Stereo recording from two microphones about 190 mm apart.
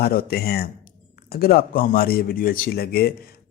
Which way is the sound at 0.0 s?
50° left (ahead or behind).